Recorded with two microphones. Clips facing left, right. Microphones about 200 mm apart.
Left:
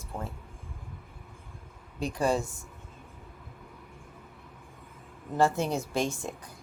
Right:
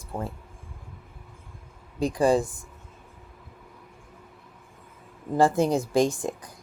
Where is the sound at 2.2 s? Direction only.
35° right (ahead or behind).